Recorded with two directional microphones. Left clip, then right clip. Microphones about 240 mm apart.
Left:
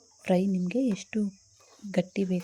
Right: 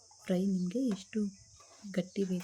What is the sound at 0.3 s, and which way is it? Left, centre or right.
Speech, left.